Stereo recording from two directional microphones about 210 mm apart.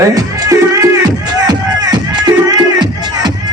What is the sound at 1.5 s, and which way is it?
Music, 20° right (ahead or behind).